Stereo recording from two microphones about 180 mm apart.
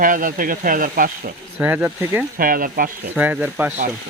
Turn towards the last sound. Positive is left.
turn(degrees=-10)  # may be behind; listen again after turning